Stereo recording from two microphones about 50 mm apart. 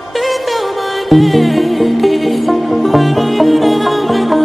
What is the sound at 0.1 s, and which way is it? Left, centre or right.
Music, centre.